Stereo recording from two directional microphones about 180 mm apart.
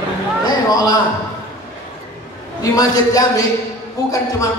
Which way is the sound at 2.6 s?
20° left (ahead or behind).